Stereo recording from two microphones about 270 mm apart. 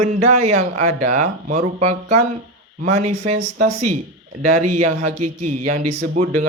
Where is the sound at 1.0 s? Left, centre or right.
Right.